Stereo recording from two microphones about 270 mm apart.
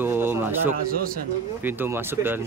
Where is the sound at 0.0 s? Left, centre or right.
Centre.